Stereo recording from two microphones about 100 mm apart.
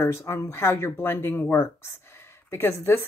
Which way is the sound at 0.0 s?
25° left (ahead or behind).